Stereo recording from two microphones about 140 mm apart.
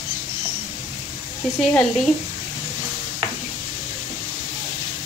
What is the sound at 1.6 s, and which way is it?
Speech, 5° left (ahead or behind).